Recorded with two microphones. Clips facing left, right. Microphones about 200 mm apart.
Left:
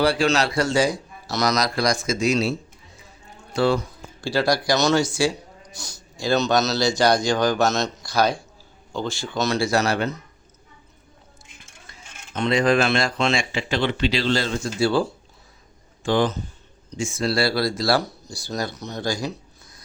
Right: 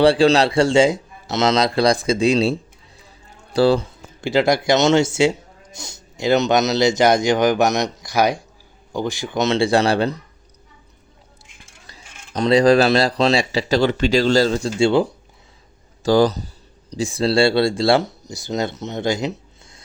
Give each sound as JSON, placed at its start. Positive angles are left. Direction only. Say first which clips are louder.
{"t": 0.0, "sound": "speech", "louder": "right 6 dB", "side_deg": -30}
{"t": 4.2, "sound": "speech", "louder": "right 4 dB", "side_deg": -20}
{"t": 11.9, "sound": "speech", "louder": "right 3 dB", "side_deg": -35}
{"t": 14.8, "sound": "speech", "louder": "right 4 dB", "side_deg": -20}
{"t": 16.0, "sound": "speech", "louder": "right 6 dB", "side_deg": -40}